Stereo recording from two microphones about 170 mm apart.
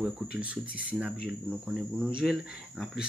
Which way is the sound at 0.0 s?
5° right (ahead or behind).